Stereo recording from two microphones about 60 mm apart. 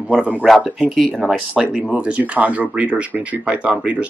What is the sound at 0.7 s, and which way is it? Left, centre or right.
Speech, centre.